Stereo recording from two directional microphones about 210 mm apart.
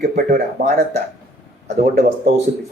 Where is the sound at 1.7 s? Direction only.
30° right (ahead or behind).